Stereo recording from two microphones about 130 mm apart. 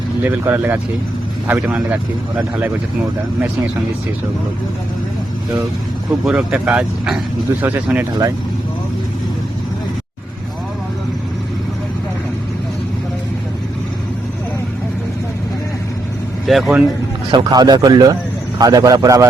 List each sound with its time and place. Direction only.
0.2 s speech: 15° right (ahead or behind)
6.2 s speech: 5° right (ahead or behind)
16.5 s speech: centre (ahead or behind)
17.3 s a man's voice: 30° right (ahead or behind)